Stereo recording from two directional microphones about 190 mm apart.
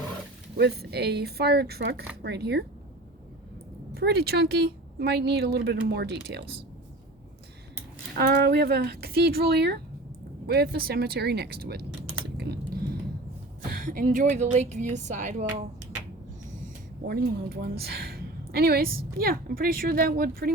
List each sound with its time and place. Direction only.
0.5 s speech: 55° right (ahead or behind)
3.9 s speech: 55° right (ahead or behind)
8.1 s speech: 50° right (ahead or behind)
12.4 s typing: 55° right (ahead or behind)
13.7 s speech: 45° right (ahead or behind)
17.1 s a woman's voice: 55° right (ahead or behind)